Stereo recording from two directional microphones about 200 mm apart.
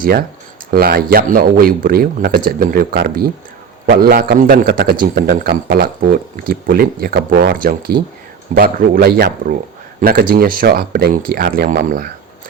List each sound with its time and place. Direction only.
0.0 s a man's voice: 45° right (ahead or behind)